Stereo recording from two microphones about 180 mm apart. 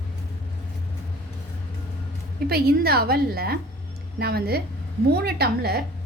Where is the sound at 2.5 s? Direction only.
60° right (ahead or behind).